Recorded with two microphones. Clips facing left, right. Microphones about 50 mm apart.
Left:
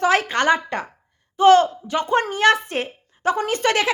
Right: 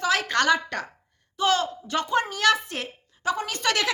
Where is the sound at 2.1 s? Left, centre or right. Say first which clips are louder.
Left 5 dB; left.